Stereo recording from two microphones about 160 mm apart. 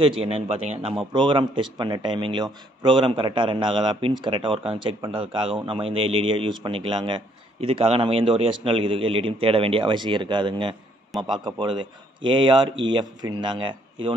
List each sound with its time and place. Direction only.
0.0 s a man's voice: 35° right (ahead or behind)